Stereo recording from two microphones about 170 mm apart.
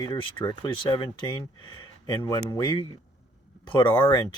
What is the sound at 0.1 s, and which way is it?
Speech, 25° left (ahead or behind).